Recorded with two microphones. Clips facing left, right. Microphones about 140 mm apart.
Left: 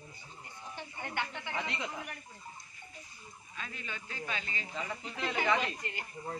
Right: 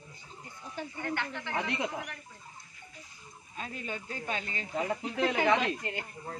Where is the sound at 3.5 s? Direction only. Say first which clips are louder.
Right 6 dB; 40° right (ahead or behind); by 5.7 s 60° right (ahead or behind).